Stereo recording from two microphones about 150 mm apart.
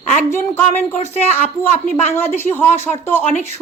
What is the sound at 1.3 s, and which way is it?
Speech, 15° left (ahead or behind).